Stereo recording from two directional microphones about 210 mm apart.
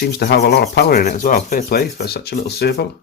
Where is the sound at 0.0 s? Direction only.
50° left (ahead or behind).